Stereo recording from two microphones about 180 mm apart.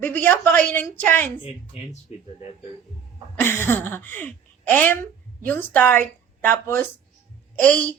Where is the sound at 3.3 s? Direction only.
15° left (ahead or behind).